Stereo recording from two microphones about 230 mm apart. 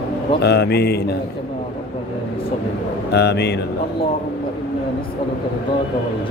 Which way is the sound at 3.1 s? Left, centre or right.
Left.